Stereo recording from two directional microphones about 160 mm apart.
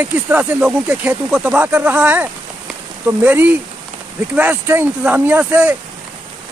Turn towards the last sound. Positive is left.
turn(degrees=-10)  # may be behind; listen again after turning